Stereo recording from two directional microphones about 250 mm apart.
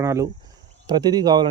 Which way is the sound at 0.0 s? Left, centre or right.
Centre.